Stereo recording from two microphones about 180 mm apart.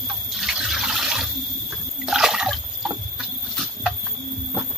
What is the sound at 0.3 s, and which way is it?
Water, centre (ahead or behind).